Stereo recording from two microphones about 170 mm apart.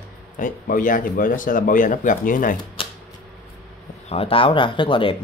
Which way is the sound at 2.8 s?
30° left (ahead or behind).